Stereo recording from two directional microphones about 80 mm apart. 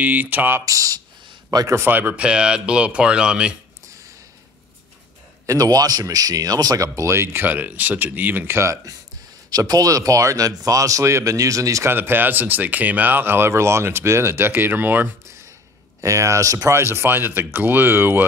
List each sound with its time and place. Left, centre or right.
0.0 s speech: right
0.7 s a sound: right
1.5 s speech: right
1.9 s speech: right
5.5 s speech: right
8.5 s speech: right
9.5 s speech: right
11.9 s speech: right
16.0 s speech: right